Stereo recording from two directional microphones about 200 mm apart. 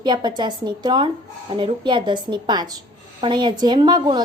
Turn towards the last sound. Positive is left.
turn(degrees=-20)  # may be behind; listen again after turning